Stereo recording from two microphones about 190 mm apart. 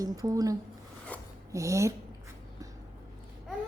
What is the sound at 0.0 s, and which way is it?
Speech, 20° right (ahead or behind).